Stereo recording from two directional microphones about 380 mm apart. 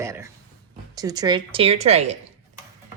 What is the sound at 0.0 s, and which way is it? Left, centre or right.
Speech, centre.